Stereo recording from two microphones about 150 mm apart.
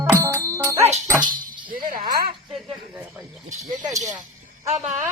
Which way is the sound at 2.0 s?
25° right (ahead or behind).